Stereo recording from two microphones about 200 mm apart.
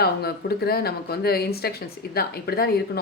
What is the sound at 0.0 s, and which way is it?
Speech, 50° left (ahead or behind).